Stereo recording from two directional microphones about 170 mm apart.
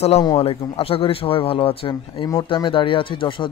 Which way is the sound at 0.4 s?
35° left (ahead or behind).